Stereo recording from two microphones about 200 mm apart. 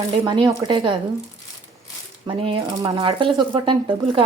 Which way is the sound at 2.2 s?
25° right (ahead or behind).